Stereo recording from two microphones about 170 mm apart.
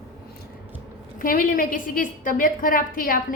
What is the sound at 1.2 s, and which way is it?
A woman's voice, 55° left (ahead or behind).